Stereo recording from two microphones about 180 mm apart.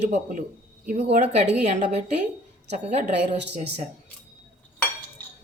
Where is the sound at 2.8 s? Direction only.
40° right (ahead or behind).